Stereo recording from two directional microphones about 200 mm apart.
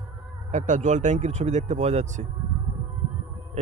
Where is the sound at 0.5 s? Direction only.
40° right (ahead or behind).